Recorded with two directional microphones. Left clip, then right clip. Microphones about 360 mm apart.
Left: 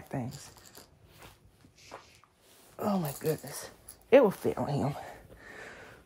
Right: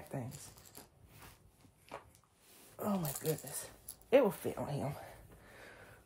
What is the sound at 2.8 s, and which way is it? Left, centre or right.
Speech, left.